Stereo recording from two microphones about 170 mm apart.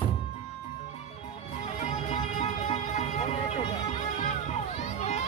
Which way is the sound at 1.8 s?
45° left (ahead or behind).